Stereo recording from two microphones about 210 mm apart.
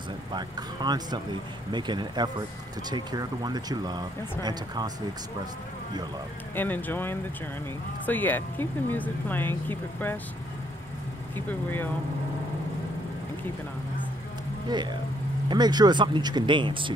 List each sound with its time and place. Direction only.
0.3 s speech: 20° right (ahead or behind)
6.5 s speech: 10° left (ahead or behind)
11.3 s speech: 10° left (ahead or behind)
14.7 s speech: 20° right (ahead or behind)